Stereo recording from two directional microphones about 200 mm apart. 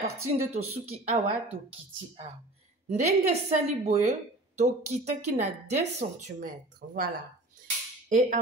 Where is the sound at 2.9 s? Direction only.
35° right (ahead or behind).